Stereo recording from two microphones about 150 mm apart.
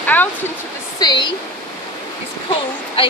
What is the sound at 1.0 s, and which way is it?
Speech, 30° left (ahead or behind).